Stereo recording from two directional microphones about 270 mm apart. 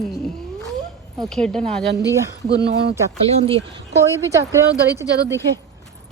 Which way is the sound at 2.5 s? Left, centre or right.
Right.